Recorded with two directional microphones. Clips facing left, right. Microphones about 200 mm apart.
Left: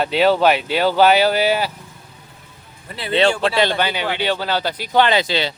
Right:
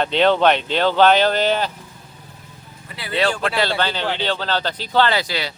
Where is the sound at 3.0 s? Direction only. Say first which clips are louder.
Left 4 dB; 25° left (ahead or behind).